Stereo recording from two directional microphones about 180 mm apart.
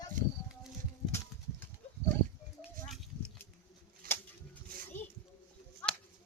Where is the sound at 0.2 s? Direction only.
45° right (ahead or behind).